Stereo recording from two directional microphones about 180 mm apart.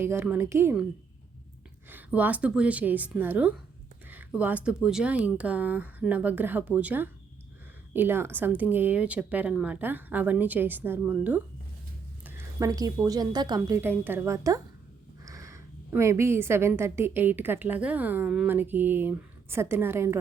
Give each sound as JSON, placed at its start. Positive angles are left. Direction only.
{"t": 0.0, "sound": "a woman's voice", "side_deg": -15}
{"t": 1.9, "sound": "a woman's voice", "side_deg": -10}